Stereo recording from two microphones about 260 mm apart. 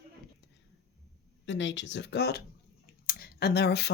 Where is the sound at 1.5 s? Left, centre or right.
Left.